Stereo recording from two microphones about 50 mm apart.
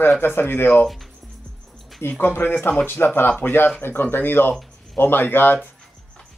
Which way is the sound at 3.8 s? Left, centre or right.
Left.